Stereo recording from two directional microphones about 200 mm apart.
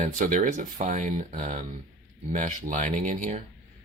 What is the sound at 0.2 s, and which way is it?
Speech, 40° right (ahead or behind).